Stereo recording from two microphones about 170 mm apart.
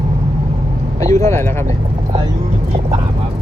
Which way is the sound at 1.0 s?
20° left (ahead or behind).